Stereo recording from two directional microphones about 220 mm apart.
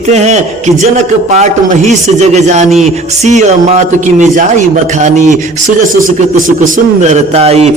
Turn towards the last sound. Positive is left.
turn(degrees=-30)  # may be behind; listen again after turning